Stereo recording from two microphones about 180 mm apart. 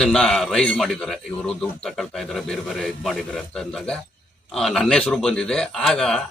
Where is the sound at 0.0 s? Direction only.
5° left (ahead or behind).